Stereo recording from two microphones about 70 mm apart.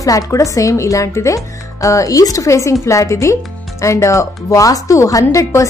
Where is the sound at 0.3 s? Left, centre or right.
Left.